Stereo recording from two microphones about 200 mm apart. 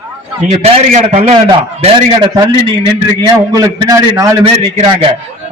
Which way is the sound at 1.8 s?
25° right (ahead or behind).